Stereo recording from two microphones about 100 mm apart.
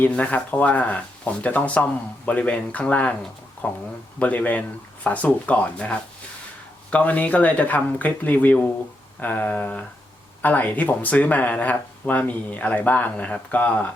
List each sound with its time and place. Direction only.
0.0 s speech: 15° left (ahead or behind)